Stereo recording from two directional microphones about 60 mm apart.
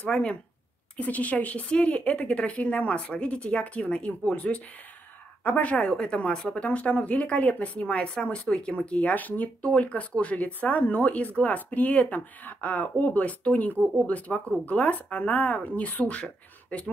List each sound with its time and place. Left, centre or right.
0.1 s a woman's voice: centre